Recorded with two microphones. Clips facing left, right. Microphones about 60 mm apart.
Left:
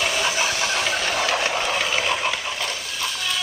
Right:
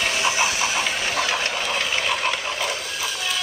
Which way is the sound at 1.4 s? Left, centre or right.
Centre.